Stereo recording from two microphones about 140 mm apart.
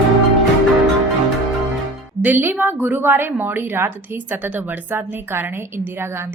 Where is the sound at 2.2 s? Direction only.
15° right (ahead or behind).